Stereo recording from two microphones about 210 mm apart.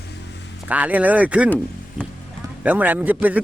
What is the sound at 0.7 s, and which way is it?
Speech, 5° right (ahead or behind).